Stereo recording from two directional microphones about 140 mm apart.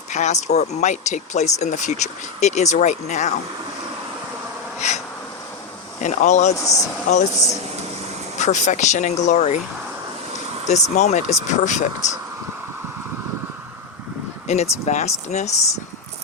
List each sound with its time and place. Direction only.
0.1 s speech: 55° left (ahead or behind)
4.8 s speech: 55° left (ahead or behind)
6.6 s speech: 25° left (ahead or behind)
7.1 s speech: 60° left (ahead or behind)
8.4 s speech: 60° left (ahead or behind)
10.7 s speech: 55° left (ahead or behind)
14.4 s speech: 55° left (ahead or behind)